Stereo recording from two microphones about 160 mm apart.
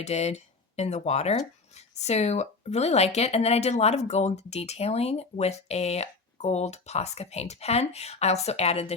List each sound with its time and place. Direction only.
0.0 s a woman's voice: 40° left (ahead or behind)